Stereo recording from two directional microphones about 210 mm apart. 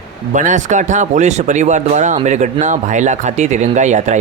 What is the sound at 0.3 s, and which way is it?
Speech, 35° right (ahead or behind).